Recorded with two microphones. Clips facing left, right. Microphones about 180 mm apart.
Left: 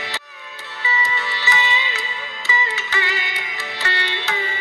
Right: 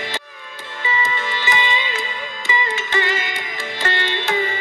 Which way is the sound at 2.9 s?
45° right (ahead or behind).